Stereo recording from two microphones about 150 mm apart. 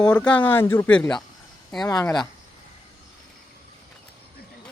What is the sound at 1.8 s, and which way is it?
Speech, 25° left (ahead or behind).